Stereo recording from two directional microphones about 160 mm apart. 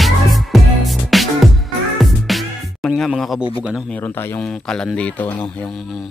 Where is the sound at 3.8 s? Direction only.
10° left (ahead or behind).